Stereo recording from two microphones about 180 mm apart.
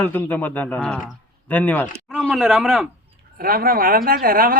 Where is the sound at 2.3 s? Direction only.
Centre (ahead or behind).